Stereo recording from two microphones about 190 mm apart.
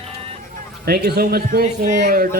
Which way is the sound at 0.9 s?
55° right (ahead or behind).